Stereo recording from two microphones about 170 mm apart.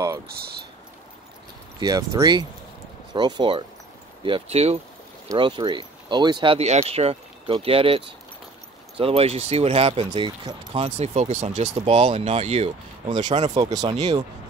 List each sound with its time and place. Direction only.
1.8 s speech: 20° right (ahead or behind); by 4.7 s 35° right (ahead or behind)
5.3 s speech: 25° right (ahead or behind); by 14.2 s 45° right (ahead or behind)